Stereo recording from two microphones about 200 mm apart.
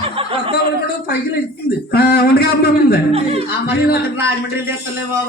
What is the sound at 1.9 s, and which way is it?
Speech, 50° left (ahead or behind).